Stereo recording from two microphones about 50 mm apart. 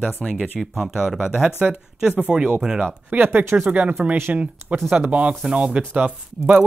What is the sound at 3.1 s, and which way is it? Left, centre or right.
Speech, right.